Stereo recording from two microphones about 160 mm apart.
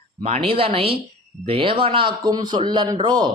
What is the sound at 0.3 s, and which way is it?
A man's voice, 35° right (ahead or behind).